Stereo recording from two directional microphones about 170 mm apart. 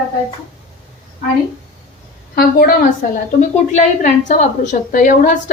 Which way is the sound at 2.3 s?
60° left (ahead or behind).